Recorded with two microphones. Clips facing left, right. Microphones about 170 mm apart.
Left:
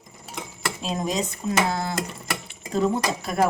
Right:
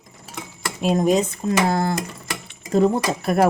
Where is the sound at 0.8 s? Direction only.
55° right (ahead or behind).